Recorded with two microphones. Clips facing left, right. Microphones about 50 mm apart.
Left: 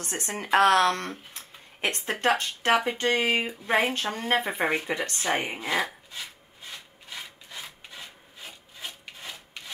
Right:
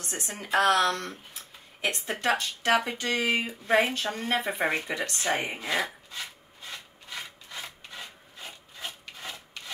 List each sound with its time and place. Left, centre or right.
0.0 s speech: left
3.3 s speech: left
3.9 s speech: left
4.6 s speech: centre
5.5 s speech: centre
6.7 s wood: centre